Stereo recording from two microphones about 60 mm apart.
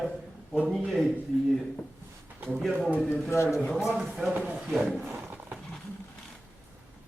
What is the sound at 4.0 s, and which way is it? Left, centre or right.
Speech, centre.